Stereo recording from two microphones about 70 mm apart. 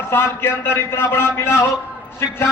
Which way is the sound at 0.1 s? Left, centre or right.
Left.